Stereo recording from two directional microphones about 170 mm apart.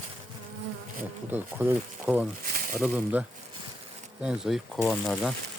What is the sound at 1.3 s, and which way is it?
Speech, 10° right (ahead or behind).